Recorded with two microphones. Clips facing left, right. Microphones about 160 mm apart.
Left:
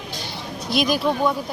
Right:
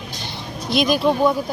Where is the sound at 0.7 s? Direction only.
5° left (ahead or behind).